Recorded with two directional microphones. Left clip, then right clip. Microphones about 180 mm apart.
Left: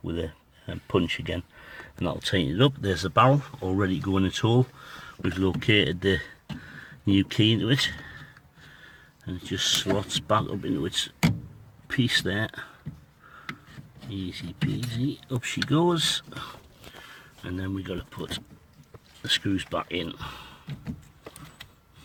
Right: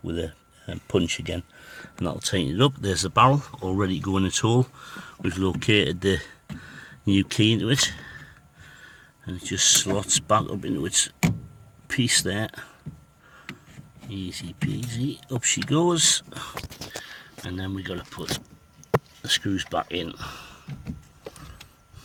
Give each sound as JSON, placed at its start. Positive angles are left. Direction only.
{"t": 0.0, "sound": "speech", "side_deg": -5}
{"t": 14.1, "sound": "speech", "side_deg": 0}